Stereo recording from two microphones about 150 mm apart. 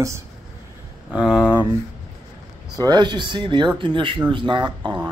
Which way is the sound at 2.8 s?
30° right (ahead or behind).